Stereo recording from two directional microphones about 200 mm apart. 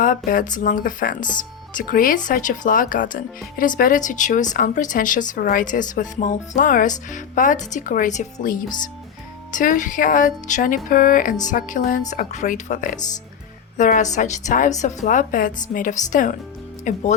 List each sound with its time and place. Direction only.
0.0 s speech: 40° left (ahead or behind)